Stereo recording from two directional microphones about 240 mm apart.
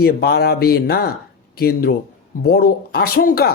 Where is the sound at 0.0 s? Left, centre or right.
Left.